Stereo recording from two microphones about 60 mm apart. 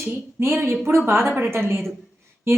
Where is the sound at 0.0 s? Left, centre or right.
Right.